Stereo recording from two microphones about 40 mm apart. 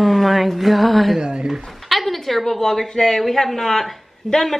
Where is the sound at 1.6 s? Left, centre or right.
Centre.